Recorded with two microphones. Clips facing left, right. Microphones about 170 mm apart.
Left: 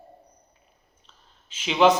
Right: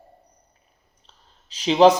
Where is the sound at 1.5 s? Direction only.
35° right (ahead or behind).